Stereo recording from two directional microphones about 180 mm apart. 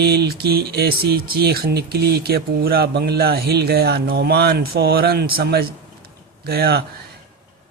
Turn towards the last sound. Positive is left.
turn(degrees=-60)  # may be behind; listen again after turning